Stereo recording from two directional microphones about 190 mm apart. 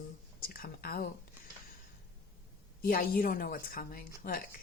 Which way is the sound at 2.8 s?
50° left (ahead or behind).